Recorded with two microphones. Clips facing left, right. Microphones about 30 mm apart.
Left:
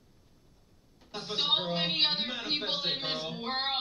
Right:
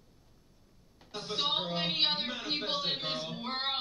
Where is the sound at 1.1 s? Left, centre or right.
Centre.